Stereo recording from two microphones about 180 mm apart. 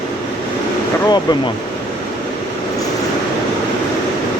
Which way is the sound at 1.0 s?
25° left (ahead or behind).